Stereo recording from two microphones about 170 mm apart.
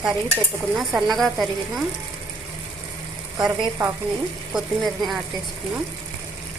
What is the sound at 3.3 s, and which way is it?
Speech, 25° right (ahead or behind).